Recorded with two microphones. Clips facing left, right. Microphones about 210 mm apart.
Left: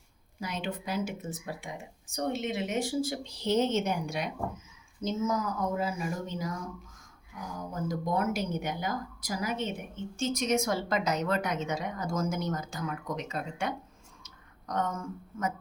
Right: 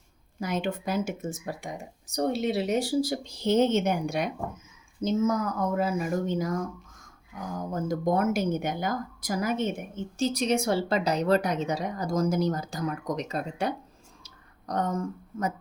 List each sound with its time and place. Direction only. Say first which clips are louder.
0.3 s speech: right 6 dB; 50° right (ahead or behind)
7.7 s speech: right 5 dB; 50° right (ahead or behind)
14.3 s a sound: right 4 dB; 35° right (ahead or behind)